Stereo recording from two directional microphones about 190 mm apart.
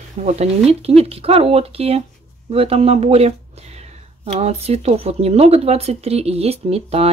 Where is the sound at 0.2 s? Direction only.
35° right (ahead or behind).